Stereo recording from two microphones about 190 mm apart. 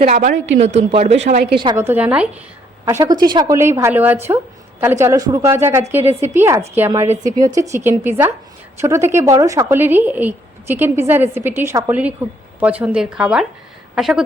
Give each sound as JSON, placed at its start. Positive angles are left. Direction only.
{"t": 0.0, "sound": "speech", "side_deg": -40}
{"t": 1.7, "sound": "a woman's voice", "side_deg": -10}
{"t": 2.8, "sound": "a woman's voice", "side_deg": -20}
{"t": 7.1, "sound": "a woman's voice", "side_deg": -40}
{"t": 7.4, "sound": "a woman's voice", "side_deg": -15}